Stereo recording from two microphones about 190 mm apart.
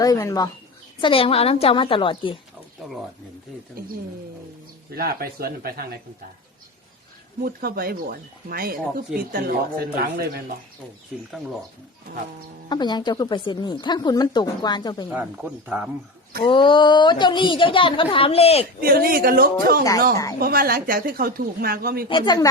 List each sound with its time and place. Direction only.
0.0 s speech: 15° left (ahead or behind)
1.0 s a woman's voice: 30° left (ahead or behind)
4.9 s speech: 50° right (ahead or behind)
7.4 s speech: 50° right (ahead or behind)
12.6 s a woman's voice: 20° left (ahead or behind)
15.1 s speech: 5° right (ahead or behind)
16.4 s a woman's voice: 25° left (ahead or behind)
18.8 s speech: 50° right (ahead or behind)
22.1 s a woman's voice: 25° left (ahead or behind)